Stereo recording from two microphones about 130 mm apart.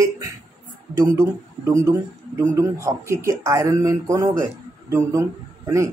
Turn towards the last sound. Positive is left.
turn(degrees=-20)  # may be behind; listen again after turning